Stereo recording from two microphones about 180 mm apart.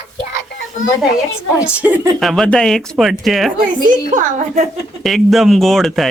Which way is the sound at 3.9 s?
40° right (ahead or behind).